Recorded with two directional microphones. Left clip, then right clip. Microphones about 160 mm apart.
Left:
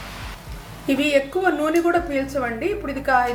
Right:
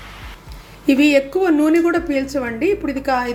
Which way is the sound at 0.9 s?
40° right (ahead or behind).